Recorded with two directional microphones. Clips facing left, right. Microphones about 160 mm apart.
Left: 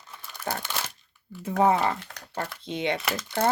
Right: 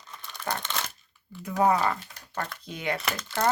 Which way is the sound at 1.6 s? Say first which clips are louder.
Left 1 dB; 25° left (ahead or behind).